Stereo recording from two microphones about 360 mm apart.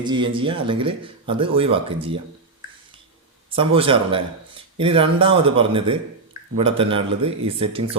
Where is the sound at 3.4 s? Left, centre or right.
Centre.